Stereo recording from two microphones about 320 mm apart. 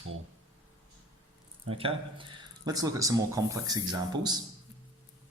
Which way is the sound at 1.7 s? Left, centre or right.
Centre.